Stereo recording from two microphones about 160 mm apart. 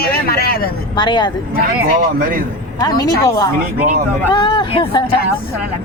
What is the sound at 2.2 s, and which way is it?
Speech, 60° right (ahead or behind).